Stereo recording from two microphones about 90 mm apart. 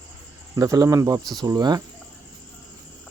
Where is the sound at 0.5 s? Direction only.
40° right (ahead or behind).